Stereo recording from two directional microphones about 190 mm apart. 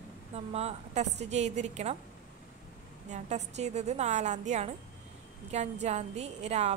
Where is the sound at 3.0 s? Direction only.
40° right (ahead or behind).